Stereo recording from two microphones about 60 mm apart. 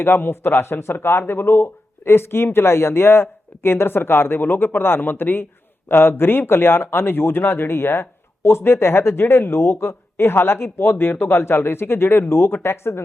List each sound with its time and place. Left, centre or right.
0.0 s a man's voice: left